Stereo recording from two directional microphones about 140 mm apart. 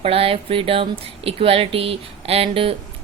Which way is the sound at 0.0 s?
45° right (ahead or behind).